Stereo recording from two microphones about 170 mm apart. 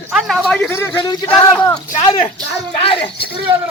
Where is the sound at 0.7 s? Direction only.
15° left (ahead or behind).